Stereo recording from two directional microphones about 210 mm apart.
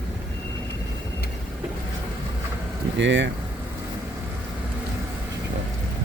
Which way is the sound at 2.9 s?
60° right (ahead or behind).